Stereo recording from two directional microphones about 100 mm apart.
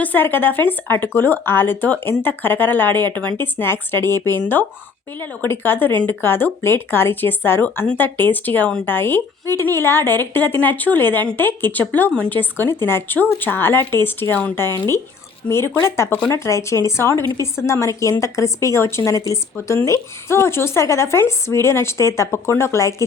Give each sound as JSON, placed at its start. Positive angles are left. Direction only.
{"t": 0.0, "sound": "a woman's voice", "side_deg": 20}